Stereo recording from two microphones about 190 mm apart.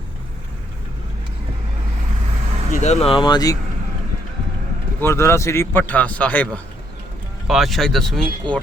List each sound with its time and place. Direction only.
2.7 s speech: 35° left (ahead or behind); by 3.6 s 20° left (ahead or behind)
4.9 s speech: 15° left (ahead or behind)